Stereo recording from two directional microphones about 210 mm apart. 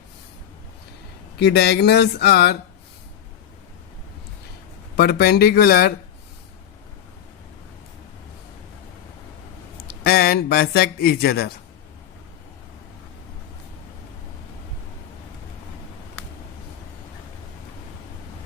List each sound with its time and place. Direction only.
1.4 s speech: 50° left (ahead or behind)
4.9 s speech: 50° left (ahead or behind)
9.8 s speech: 45° left (ahead or behind)